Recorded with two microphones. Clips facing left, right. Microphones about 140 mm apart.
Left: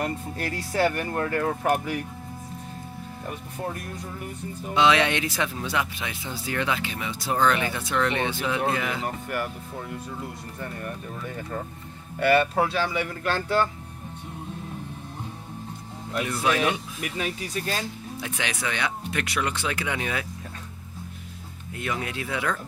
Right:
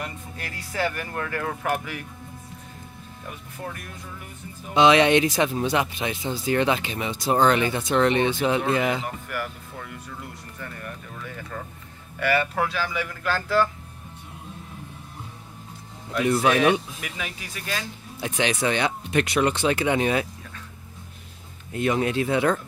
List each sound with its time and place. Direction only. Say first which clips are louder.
0.0 s speech: left 6 dB; 40° left (ahead or behind)
3.3 s speech: left 3 dB; 30° left (ahead or behind)
4.7 s speech: right 5 dB; 20° right (ahead or behind)
9.3 s speech: left 2 dB; 30° left (ahead or behind)
16.3 s speech: right 6 dB; 25° right (ahead or behind)
17.2 s speech: left 9 dB; 35° left (ahead or behind)
18.2 s speech: right 7 dB; 25° right (ahead or behind)
21.7 s speech: right 8 dB; 30° right (ahead or behind)